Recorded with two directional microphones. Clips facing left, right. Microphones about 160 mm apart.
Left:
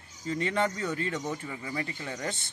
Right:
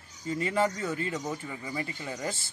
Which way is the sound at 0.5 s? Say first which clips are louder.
Right 3 dB; 5° right (ahead or behind).